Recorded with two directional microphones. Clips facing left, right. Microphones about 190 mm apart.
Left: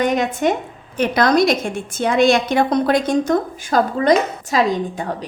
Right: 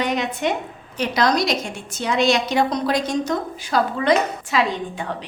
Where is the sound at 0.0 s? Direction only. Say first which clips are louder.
Left 5 dB; 50° left (ahead or behind).